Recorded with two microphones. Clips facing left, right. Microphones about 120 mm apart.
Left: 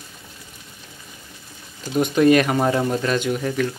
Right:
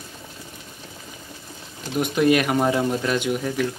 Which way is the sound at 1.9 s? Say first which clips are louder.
Left 3 dB; 5° right (ahead or behind).